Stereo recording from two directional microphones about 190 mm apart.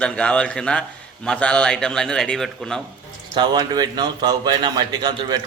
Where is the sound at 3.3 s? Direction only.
20° right (ahead or behind).